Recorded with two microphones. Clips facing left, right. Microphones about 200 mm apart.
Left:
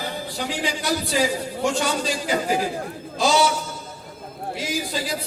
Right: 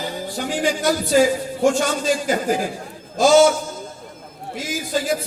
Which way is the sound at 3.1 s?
50° right (ahead or behind).